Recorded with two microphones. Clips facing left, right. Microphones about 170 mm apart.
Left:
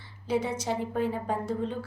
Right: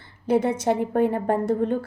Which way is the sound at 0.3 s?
55° right (ahead or behind).